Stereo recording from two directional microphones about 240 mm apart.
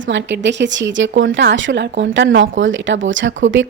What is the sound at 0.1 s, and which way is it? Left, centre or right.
A woman's voice, right.